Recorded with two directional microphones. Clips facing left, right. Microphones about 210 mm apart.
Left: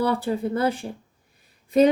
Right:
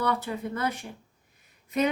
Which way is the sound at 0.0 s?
30° left (ahead or behind).